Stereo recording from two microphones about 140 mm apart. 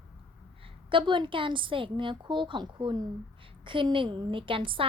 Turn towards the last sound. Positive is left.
turn(degrees=-40)  # may be behind; listen again after turning